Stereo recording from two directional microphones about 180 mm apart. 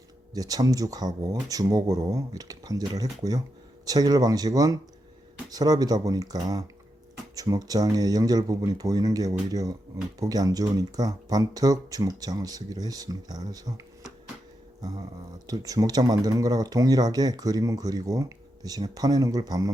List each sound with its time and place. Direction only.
0.3 s speech: 20° right (ahead or behind)
14.8 s a sound: 20° right (ahead or behind)
15.4 s speech: 20° right (ahead or behind)